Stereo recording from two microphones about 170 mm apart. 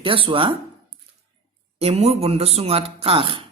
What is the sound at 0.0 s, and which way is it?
Speech, 30° right (ahead or behind).